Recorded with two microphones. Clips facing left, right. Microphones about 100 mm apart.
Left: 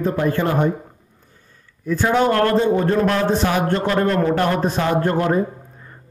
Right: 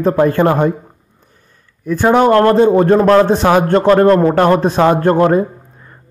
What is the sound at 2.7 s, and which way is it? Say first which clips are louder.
Speech: right 9 dB; 45° right (ahead or behind).